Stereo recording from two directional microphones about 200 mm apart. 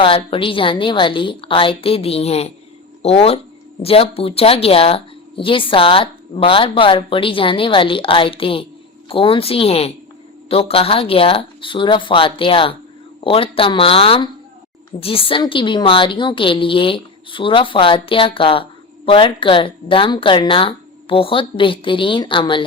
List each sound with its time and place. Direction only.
0.0 s a woman's voice: 25° left (ahead or behind)